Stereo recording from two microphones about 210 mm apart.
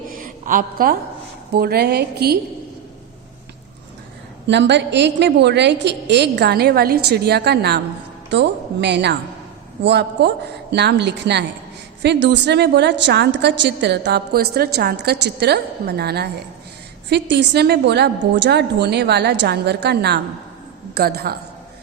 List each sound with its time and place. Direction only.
0.1 s a sound: 40° right (ahead or behind)
1.5 s a woman's voice: 50° right (ahead or behind)
4.4 s a woman's voice: 55° right (ahead or behind)